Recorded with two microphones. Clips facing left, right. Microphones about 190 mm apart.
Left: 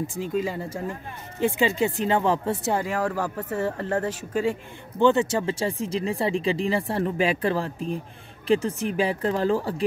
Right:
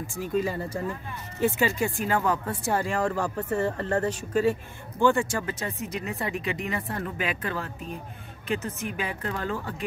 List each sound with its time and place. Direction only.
0.0 s speech: 20° left (ahead or behind)
2.8 s speech: 5° left (ahead or behind); by 9.8 s 35° left (ahead or behind)